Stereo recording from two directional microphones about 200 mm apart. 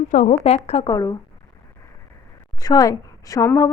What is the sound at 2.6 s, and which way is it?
A woman's voice, 20° left (ahead or behind).